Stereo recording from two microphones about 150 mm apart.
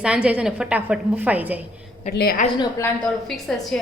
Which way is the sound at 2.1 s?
90° left.